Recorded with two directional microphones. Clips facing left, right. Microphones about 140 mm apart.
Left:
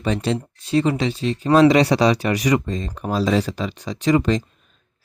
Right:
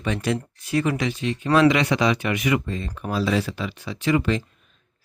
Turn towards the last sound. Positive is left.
turn(degrees=35)  # may be behind; listen again after turning